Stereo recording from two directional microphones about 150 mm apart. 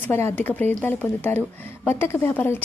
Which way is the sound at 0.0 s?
15° left (ahead or behind).